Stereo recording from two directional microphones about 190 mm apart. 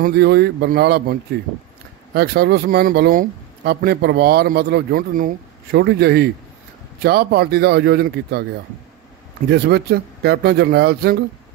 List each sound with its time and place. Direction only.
0.0 s a man's voice: 60° right (ahead or behind)
2.1 s a man's voice: 60° right (ahead or behind)
9.5 s a man's voice: 60° right (ahead or behind)